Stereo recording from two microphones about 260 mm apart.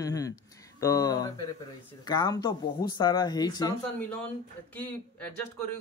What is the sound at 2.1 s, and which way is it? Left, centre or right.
Speech, centre.